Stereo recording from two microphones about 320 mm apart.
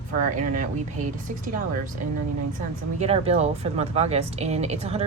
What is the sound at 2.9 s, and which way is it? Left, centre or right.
Speech, centre.